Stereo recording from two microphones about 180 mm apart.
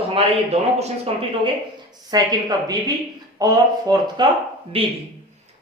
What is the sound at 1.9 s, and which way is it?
A woman's voice, 20° right (ahead or behind).